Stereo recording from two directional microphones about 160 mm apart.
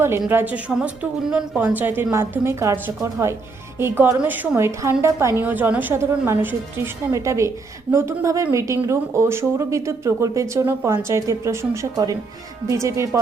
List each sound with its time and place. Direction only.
0.3 s a woman's voice: 10° right (ahead or behind)